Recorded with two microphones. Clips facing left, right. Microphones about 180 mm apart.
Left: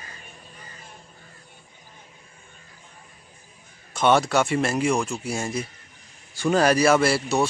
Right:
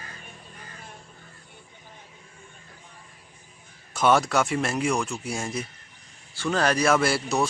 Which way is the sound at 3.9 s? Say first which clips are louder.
Left 2 dB; centre (ahead or behind).